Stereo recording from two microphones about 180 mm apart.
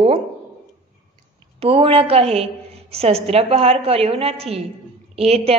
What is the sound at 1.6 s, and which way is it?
A woman's voice, 30° right (ahead or behind).